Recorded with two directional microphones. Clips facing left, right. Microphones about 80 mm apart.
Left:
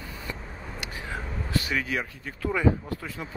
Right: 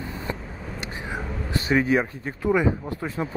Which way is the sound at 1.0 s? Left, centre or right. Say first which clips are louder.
Right 4 dB; right.